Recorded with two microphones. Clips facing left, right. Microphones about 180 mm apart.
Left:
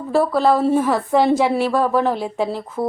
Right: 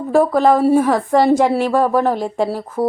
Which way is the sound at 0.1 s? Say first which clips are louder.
Right 3 dB; 15° right (ahead or behind).